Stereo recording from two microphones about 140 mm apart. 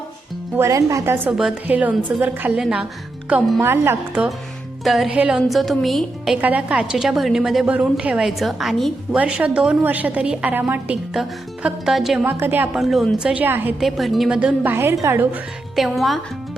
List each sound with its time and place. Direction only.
0.5 s a woman's voice: 20° right (ahead or behind); by 2.8 s 5° right (ahead or behind)
3.6 s a woman's voice: 15° right (ahead or behind)
4.8 s a woman's voice: centre (ahead or behind)
12.2 s a woman's voice: 15° right (ahead or behind)
12.8 s a woman's voice: centre (ahead or behind)
13.8 s a woman's voice: centre (ahead or behind)
15.7 s a woman's voice: centre (ahead or behind)